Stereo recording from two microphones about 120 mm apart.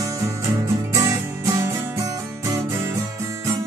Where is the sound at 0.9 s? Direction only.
25° right (ahead or behind).